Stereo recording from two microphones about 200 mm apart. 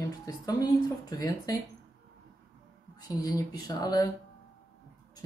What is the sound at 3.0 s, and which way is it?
A woman's voice, 20° left (ahead or behind).